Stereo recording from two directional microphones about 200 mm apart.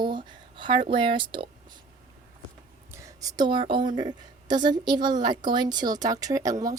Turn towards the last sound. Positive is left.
turn(degrees=-15)  # may be behind; listen again after turning